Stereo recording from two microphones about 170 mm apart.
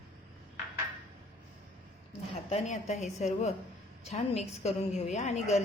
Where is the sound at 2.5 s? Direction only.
40° left (ahead or behind).